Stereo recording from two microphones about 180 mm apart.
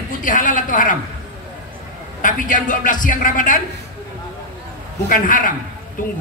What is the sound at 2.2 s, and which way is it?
A man's voice, 50° left (ahead or behind).